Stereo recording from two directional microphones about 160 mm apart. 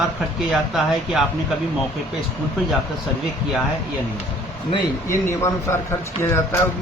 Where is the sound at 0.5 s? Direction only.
Centre (ahead or behind).